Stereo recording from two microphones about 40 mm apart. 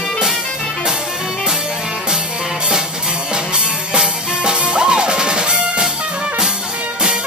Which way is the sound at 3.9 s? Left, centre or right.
Right.